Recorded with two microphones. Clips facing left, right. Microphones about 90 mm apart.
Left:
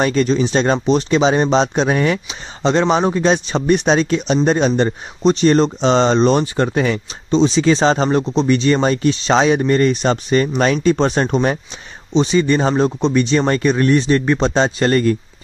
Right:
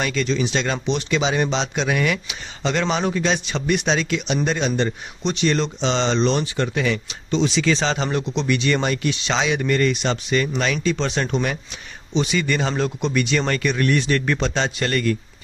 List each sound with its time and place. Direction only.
0.0 s speech: 40° left (ahead or behind)